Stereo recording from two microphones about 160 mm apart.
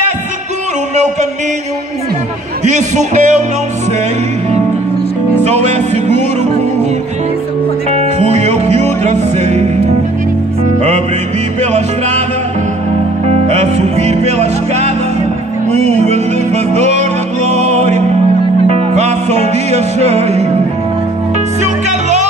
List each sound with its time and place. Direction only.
2.6 s speech: 50° right (ahead or behind)
5.5 s speech: 45° right (ahead or behind)
7.9 s music: 45° right (ahead or behind)
11.6 s music: 45° right (ahead or behind)
13.5 s music: 45° right (ahead or behind)
21.8 s music: 45° right (ahead or behind)